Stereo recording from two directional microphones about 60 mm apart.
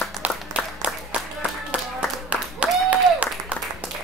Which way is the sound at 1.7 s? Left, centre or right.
Right.